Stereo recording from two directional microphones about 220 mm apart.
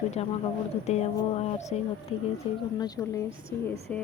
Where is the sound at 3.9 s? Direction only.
5° left (ahead or behind).